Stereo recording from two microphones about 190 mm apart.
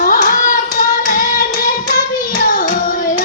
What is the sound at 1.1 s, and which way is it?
Child singing, 45° left (ahead or behind).